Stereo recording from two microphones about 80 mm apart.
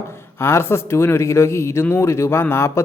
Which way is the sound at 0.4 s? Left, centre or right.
Left.